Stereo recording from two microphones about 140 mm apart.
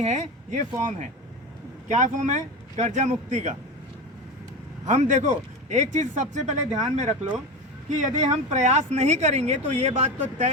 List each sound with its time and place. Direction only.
0.0 s speech: 60° right (ahead or behind)
4.9 s speech: 60° right (ahead or behind)
7.9 s speech: 60° right (ahead or behind)